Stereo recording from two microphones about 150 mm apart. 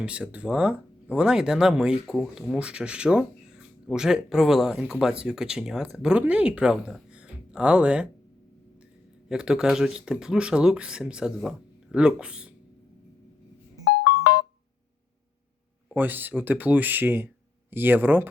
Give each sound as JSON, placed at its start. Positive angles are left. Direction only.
{"t": 0.0, "sound": "speech", "side_deg": -10}
{"t": 9.3, "sound": "speech", "side_deg": -5}
{"t": 14.0, "sound": "ringtone", "side_deg": 90}
{"t": 15.9, "sound": "speech", "side_deg": -10}